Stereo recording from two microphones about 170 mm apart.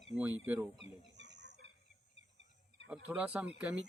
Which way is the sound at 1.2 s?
90° right.